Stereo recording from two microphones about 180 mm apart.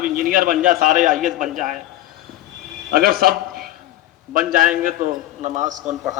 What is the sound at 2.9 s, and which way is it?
A man's voice, 55° right (ahead or behind).